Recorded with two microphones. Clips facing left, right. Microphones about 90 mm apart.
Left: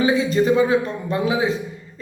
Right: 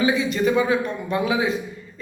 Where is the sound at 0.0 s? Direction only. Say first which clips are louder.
Left 2 dB; 35° left (ahead or behind).